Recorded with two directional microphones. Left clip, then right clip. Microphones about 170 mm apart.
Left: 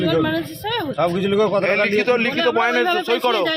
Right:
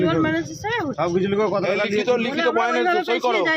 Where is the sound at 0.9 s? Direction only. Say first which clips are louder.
Left 4 dB; 50° left (ahead or behind).